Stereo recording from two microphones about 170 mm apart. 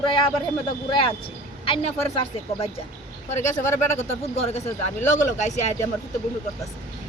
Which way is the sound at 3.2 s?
45° left (ahead or behind).